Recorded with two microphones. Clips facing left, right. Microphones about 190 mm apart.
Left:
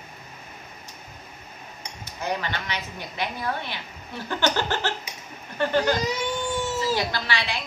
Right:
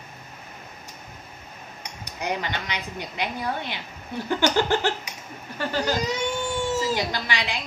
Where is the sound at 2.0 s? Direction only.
15° right (ahead or behind).